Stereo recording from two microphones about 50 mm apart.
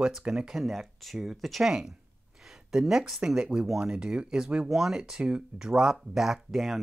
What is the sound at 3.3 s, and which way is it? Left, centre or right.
Speech, centre.